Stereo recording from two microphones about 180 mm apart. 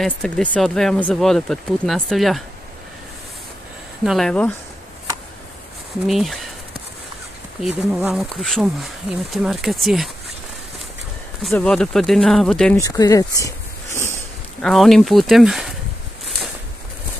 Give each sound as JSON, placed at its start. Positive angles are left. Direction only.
{"t": 0.0, "sound": "speech", "side_deg": 5}
{"t": 4.0, "sound": "speech", "side_deg": 0}
{"t": 6.0, "sound": "speech", "side_deg": 0}
{"t": 7.6, "sound": "speech", "side_deg": 0}
{"t": 11.4, "sound": "speech", "side_deg": 5}
{"t": 12.7, "sound": "speech", "side_deg": 20}
{"t": 14.6, "sound": "speech", "side_deg": 0}